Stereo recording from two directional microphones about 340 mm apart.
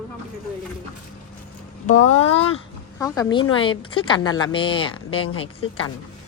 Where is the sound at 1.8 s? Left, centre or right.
Left.